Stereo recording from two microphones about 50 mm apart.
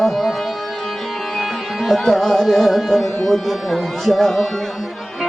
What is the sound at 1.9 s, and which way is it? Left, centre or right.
Music, centre.